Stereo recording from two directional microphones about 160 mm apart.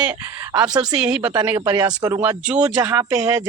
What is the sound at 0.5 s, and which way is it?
Speech, 25° right (ahead or behind).